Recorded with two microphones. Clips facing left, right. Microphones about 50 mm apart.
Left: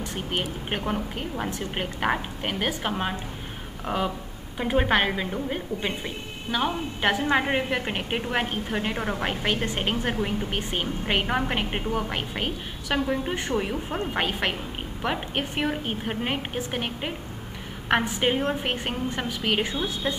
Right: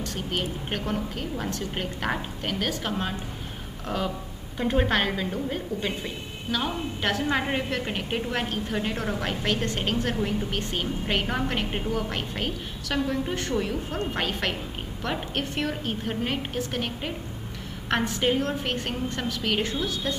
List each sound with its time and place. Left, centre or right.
0.0 s a woman's voice: centre
3.8 s a sound: centre
4.6 s a woman's voice: centre